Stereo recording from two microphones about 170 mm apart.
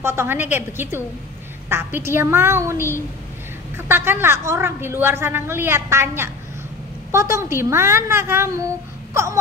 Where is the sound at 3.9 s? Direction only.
15° right (ahead or behind).